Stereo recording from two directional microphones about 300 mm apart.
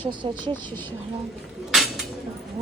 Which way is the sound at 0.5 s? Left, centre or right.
Centre.